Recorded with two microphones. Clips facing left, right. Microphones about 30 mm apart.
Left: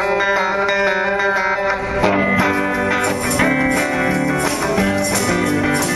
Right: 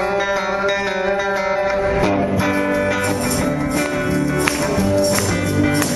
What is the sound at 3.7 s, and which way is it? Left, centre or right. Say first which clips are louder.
Music: left 2 dB; left.